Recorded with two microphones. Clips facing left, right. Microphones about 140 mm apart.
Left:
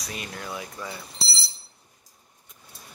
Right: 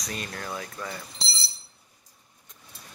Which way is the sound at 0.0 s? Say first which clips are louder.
Right 1 dB; 10° left (ahead or behind).